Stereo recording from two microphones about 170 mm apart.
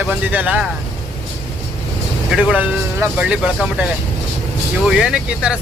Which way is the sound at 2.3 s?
5° right (ahead or behind).